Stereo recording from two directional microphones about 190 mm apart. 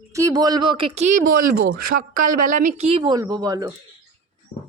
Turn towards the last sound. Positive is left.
turn(degrees=-20)  # may be behind; listen again after turning